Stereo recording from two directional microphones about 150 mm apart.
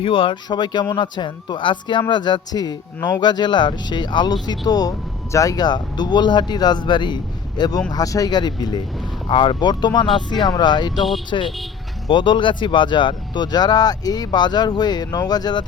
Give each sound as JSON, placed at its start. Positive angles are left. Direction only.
{"t": 0.0, "sound": "speech", "side_deg": 35}